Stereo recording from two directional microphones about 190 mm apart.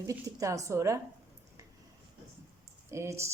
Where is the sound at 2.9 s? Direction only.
15° right (ahead or behind).